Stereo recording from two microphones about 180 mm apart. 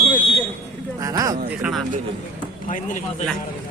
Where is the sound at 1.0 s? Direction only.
20° right (ahead or behind).